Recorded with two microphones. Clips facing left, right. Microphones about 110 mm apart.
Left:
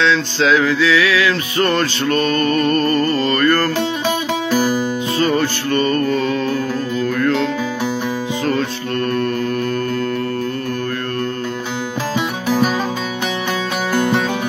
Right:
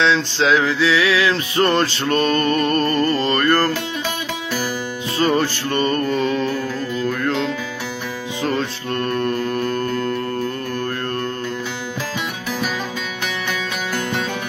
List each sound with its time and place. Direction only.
0.0 s music: 25° right (ahead or behind)
5.2 s music: 30° right (ahead or behind)
8.5 s music: 25° right (ahead or behind)